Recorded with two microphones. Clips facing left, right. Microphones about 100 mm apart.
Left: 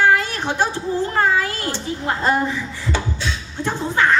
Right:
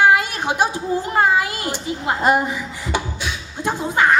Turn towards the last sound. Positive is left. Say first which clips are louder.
# right 1 dB
turn(degrees=-15)  # may be behind; listen again after turning